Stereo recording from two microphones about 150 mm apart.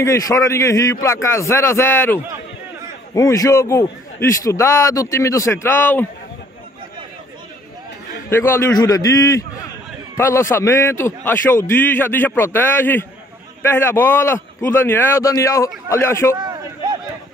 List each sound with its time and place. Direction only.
0.0 s a man's voice: 20° left (ahead or behind)
3.2 s a man's voice: 20° left (ahead or behind)
8.3 s a man's voice: 15° left (ahead or behind)
16.3 s a sound: 30° right (ahead or behind)